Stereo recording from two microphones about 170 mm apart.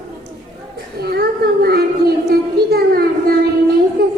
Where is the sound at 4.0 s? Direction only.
65° right (ahead or behind).